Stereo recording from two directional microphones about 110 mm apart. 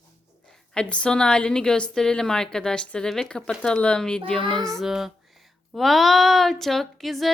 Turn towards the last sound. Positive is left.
turn(degrees=0)  # may be behind; listen again after turning